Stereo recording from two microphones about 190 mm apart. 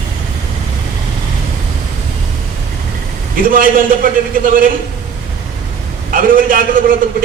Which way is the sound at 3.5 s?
45° right (ahead or behind).